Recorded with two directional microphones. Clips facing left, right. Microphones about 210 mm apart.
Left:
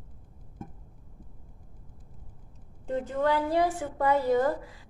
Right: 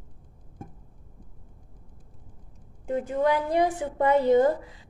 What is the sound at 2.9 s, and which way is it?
A woman's voice, 15° right (ahead or behind).